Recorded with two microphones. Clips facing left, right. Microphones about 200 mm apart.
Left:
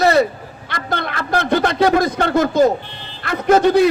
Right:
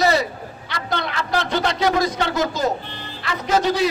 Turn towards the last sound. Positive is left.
turn(degrees=55)  # may be behind; listen again after turning